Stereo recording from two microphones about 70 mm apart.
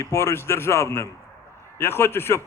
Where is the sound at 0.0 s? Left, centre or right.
Left.